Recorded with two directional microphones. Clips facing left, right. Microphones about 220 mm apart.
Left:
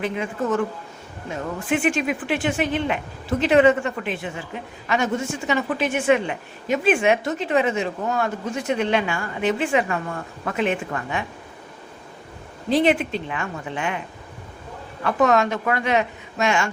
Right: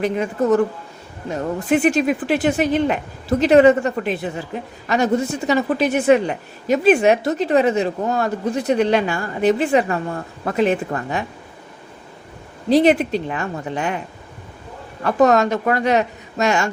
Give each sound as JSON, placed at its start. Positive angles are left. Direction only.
{"t": 0.0, "sound": "a woman's voice", "side_deg": -40}
{"t": 12.7, "sound": "a woman's voice", "side_deg": -40}
{"t": 15.0, "sound": "a woman's voice", "side_deg": -40}